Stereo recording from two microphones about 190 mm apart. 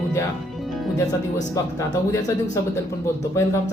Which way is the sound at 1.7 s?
15° left (ahead or behind).